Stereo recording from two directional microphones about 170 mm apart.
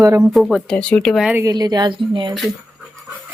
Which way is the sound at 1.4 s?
20° right (ahead or behind).